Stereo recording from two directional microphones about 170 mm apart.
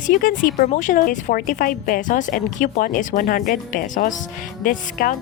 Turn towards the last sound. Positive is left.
turn(degrees=55)  # may be behind; listen again after turning